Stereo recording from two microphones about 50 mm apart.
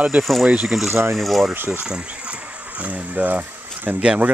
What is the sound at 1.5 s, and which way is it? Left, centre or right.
Speech, right.